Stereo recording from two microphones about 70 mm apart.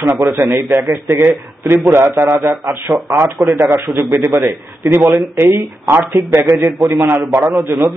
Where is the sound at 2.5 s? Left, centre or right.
Right.